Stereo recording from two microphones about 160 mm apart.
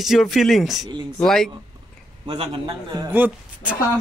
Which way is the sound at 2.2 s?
35° right (ahead or behind).